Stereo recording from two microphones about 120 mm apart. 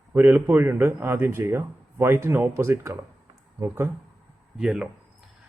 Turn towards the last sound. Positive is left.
turn(degrees=-5)  # may be behind; listen again after turning